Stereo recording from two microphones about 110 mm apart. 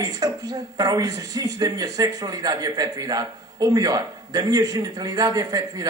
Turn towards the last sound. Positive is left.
turn(degrees=-35)  # may be behind; listen again after turning